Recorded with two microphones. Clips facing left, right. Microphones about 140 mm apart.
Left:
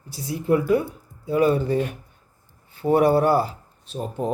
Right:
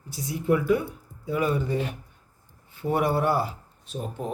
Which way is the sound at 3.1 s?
30° left (ahead or behind).